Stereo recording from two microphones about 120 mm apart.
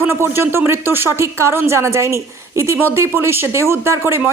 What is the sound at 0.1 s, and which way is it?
Speech, 20° right (ahead or behind).